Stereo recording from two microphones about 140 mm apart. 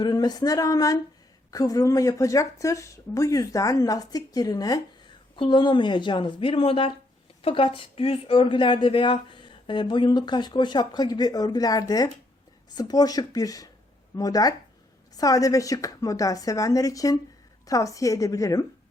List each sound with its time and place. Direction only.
0.0 s speech: 30° left (ahead or behind)